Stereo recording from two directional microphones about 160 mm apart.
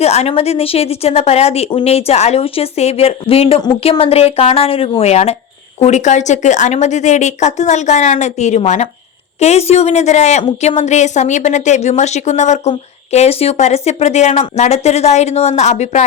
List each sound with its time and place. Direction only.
0.0 s a woman's voice: 40° left (ahead or behind)